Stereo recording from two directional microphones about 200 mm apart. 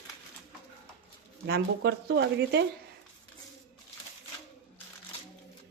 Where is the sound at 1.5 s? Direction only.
55° right (ahead or behind).